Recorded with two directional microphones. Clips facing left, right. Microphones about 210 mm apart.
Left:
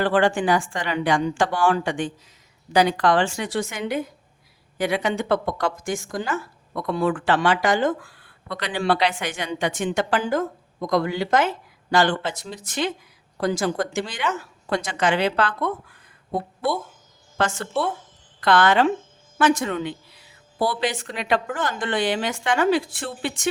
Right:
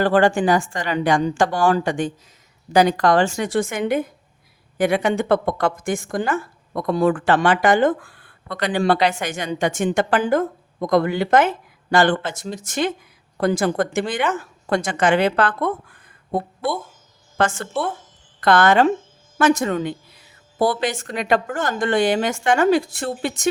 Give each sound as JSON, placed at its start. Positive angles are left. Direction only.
{"t": 0.0, "sound": "a woman's voice", "side_deg": -40}